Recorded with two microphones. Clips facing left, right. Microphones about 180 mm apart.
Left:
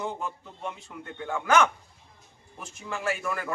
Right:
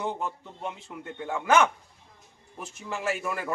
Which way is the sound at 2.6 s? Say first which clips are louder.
Even; 5° right (ahead or behind).